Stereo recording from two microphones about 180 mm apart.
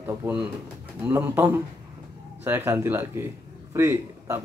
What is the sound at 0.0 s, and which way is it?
Speech, 10° right (ahead or behind).